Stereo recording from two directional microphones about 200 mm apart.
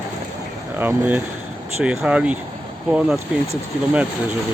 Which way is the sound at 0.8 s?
10° right (ahead or behind).